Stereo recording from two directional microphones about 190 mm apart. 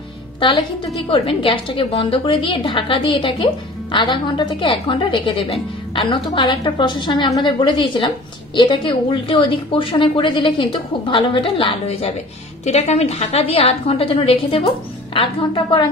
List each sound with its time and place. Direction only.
0.4 s a woman's voice: 25° left (ahead or behind)